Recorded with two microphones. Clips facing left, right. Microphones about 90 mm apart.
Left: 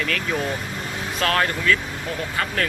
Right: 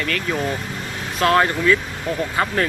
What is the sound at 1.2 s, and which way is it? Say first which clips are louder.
Speech: right 5 dB; 20° right (ahead or behind).